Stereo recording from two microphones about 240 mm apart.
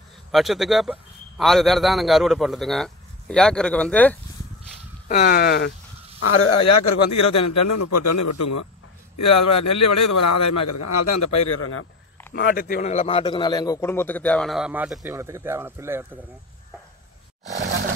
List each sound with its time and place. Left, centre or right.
0.3 s a man's voice: centre
5.0 s speech: left
6.1 s speech: left
6.7 s a man's voice: left
9.7 s a man's voice: left
12.4 s a man's voice: left; by 16.1 s centre